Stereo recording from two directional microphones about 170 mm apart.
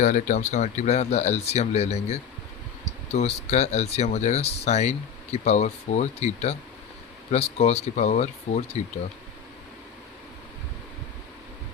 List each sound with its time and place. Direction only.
0.0 s speech: 45° left (ahead or behind)